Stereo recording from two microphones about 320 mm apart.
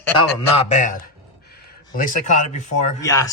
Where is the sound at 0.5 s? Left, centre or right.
Left.